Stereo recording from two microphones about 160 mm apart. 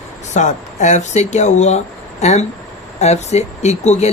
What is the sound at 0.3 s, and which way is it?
Speech, 50° left (ahead or behind).